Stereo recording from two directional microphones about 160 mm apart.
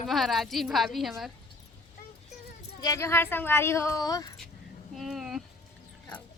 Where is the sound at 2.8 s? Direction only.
20° left (ahead or behind).